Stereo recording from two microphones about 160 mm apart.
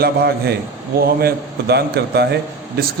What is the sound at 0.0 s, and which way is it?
A man's voice, 80° right.